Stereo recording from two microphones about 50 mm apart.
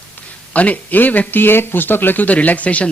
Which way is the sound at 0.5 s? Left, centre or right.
Left.